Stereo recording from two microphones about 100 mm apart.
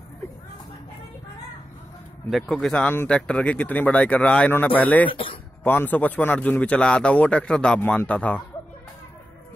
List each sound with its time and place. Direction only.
2.3 s a man's voice: 5° left (ahead or behind)
5.1 s speech: 60° left (ahead or behind)
5.6 s a man's voice: 20° left (ahead or behind)